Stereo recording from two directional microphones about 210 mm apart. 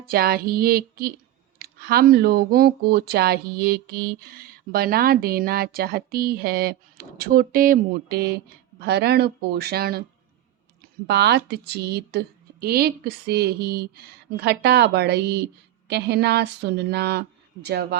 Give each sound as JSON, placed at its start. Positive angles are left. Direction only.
{"t": 0.0, "sound": "speech", "side_deg": -45}
{"t": 11.0, "sound": "speech", "side_deg": -50}